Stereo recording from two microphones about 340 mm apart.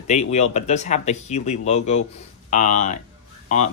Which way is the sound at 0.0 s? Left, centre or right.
Centre.